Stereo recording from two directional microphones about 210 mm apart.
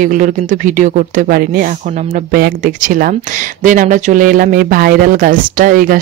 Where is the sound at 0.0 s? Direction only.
40° right (ahead or behind).